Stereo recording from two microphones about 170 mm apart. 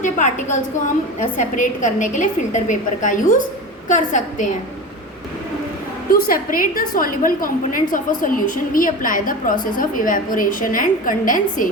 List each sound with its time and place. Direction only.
0.0 s a woman's voice: 45° left (ahead or behind)
6.1 s a woman's voice: 60° left (ahead or behind)